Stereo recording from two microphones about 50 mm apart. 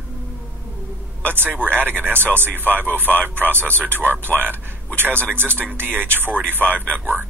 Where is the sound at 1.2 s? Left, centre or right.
Right.